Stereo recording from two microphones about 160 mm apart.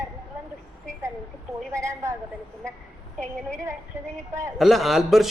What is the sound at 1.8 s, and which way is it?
Speech, 20° right (ahead or behind).